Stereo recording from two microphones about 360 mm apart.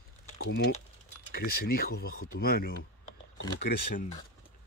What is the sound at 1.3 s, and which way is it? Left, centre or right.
Speech, left.